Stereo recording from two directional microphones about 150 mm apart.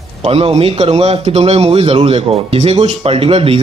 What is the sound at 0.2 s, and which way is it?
Speech, 40° right (ahead or behind).